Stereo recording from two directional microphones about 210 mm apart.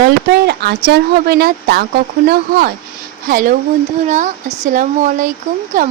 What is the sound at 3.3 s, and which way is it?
Speech, 45° right (ahead or behind).